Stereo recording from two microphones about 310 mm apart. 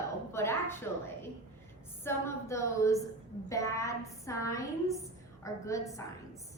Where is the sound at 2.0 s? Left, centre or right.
Centre.